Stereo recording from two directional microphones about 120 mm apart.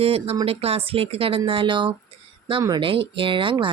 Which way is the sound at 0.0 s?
55° right (ahead or behind).